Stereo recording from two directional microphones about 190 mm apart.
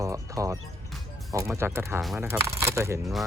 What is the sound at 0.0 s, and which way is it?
Speech, 15° right (ahead or behind).